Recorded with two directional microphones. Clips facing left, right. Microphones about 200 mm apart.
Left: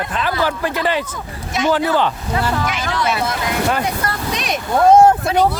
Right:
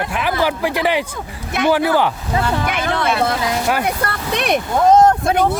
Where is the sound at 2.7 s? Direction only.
55° right (ahead or behind).